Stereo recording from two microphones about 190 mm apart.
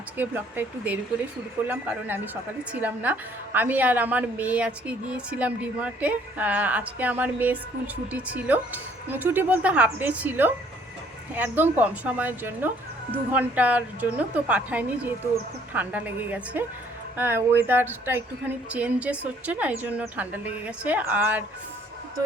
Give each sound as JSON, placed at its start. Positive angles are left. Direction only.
{"t": 0.2, "sound": "a woman's voice", "side_deg": -10}